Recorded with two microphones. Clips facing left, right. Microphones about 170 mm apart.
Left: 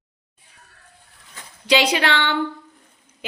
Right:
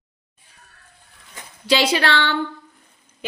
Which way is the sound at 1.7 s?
15° left (ahead or behind).